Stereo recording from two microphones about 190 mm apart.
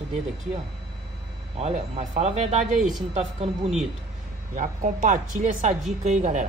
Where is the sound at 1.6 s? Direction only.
40° right (ahead or behind).